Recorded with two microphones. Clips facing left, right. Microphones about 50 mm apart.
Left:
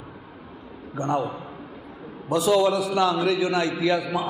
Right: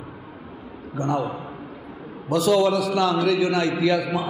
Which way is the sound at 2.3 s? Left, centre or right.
Left.